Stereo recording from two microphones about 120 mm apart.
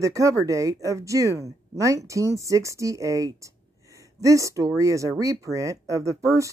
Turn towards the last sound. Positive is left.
turn(degrees=-25)  # may be behind; listen again after turning